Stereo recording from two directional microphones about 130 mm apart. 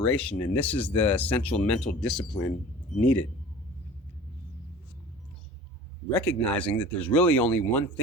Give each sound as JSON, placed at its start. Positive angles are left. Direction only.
{"t": 0.0, "sound": "speech", "side_deg": 10}
{"t": 6.1, "sound": "speech", "side_deg": 10}